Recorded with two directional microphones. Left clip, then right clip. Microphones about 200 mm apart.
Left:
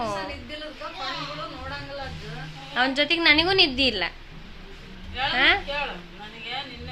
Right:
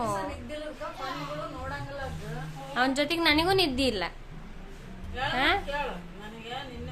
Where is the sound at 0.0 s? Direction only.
5° left (ahead or behind).